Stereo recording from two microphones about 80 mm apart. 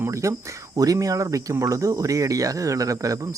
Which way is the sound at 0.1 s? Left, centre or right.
Right.